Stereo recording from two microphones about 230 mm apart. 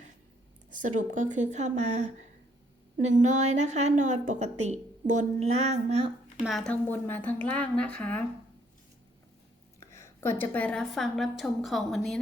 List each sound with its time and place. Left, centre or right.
0.9 s a woman's voice: right
3.2 s a woman's voice: right
6.4 s a woman's voice: centre
9.9 s a woman's voice: centre